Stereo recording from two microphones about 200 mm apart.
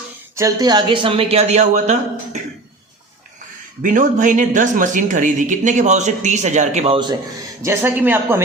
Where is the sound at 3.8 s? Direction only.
40° right (ahead or behind).